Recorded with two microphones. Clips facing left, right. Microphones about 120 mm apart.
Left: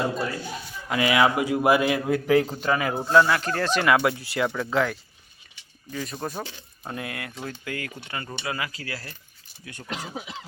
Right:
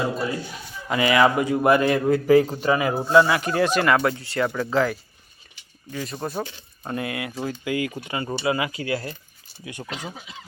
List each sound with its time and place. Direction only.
0.9 s a man's voice: centre (ahead or behind)
3.8 s a man's voice: 5° left (ahead or behind); by 9.1 s 25° right (ahead or behind)